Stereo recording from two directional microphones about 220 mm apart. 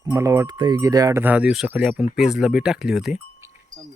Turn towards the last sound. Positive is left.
turn(degrees=0)  # may be behind; listen again after turning